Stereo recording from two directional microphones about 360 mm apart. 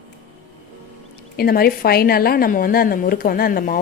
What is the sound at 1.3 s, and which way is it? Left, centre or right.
A woman's voice, left.